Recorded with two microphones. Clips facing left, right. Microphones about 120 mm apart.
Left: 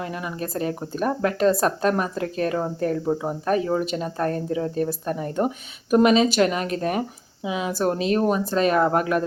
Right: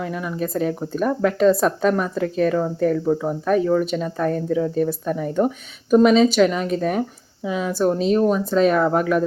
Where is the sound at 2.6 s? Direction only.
15° left (ahead or behind).